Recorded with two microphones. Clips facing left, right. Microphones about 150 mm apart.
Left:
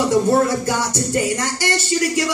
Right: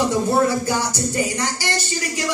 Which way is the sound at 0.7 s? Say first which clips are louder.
Left 1 dB; 55° left (ahead or behind).